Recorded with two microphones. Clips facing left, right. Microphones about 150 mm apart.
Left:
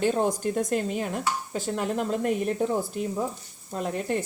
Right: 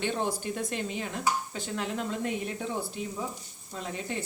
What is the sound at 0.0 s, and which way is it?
A woman's voice, 40° left (ahead or behind).